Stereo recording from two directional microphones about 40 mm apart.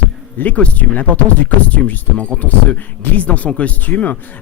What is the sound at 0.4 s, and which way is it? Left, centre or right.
Speech, left.